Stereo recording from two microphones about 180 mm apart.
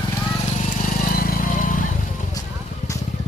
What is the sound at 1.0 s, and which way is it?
Vehicle, 50° left (ahead or behind).